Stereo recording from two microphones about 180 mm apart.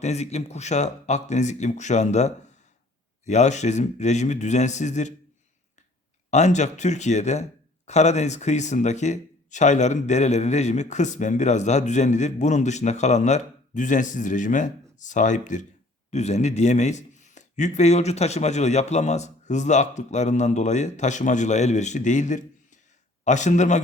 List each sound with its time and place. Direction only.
0.0 s speech: 40° left (ahead or behind)
6.3 s speech: 40° left (ahead or behind)